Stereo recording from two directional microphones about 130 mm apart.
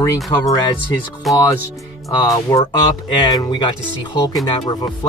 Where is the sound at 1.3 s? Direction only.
Centre (ahead or behind).